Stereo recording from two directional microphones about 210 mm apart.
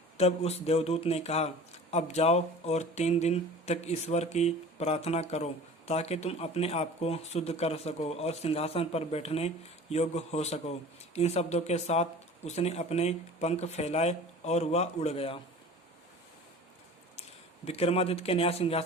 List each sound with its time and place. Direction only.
0.2 s speech: 30° left (ahead or behind)
17.7 s speech: 30° left (ahead or behind)